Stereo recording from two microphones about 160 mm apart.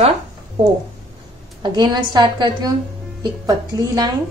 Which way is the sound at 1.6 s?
30° right (ahead or behind).